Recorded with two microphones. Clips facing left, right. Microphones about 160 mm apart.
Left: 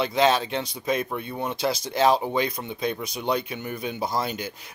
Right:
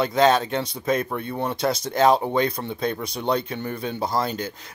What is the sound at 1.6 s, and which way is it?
Speech, 15° left (ahead or behind).